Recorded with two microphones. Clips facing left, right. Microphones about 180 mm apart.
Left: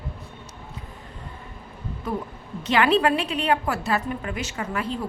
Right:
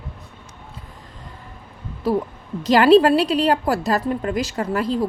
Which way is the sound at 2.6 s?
35° right (ahead or behind).